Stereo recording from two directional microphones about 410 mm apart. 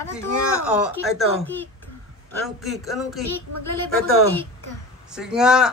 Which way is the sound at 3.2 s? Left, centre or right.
Left.